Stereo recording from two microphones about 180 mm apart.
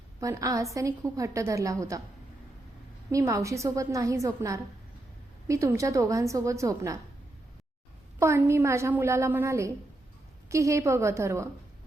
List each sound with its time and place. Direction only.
0.2 s a woman's voice: 20° right (ahead or behind)
3.1 s a woman's voice: 15° right (ahead or behind)
8.2 s a woman's voice: 15° right (ahead or behind)